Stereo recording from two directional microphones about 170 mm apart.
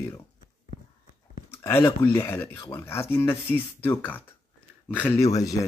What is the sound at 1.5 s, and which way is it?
Speech, 15° left (ahead or behind).